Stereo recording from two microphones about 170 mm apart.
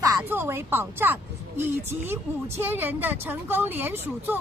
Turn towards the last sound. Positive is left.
turn(degrees=-10)  # may be behind; listen again after turning